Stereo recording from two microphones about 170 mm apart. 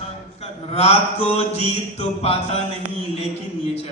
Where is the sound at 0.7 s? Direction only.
40° left (ahead or behind).